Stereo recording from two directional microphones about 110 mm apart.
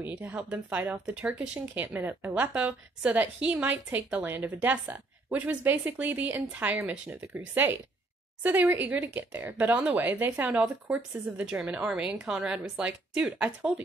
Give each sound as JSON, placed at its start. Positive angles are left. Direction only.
{"t": 0.0, "sound": "speech", "side_deg": -15}